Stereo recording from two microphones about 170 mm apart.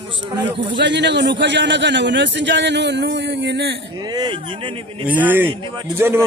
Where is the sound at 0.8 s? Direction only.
90° right.